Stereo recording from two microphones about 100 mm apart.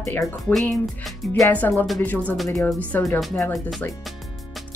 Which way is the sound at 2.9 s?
25° left (ahead or behind).